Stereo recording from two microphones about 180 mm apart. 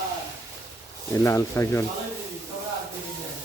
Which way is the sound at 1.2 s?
15° left (ahead or behind).